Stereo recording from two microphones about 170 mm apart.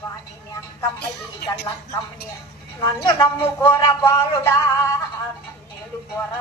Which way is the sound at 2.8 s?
20° left (ahead or behind).